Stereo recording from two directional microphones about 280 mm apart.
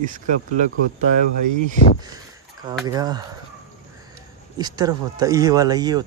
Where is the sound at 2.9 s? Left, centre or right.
Centre.